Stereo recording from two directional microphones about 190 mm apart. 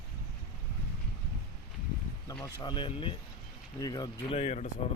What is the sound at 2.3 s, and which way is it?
Speech, 20° left (ahead or behind).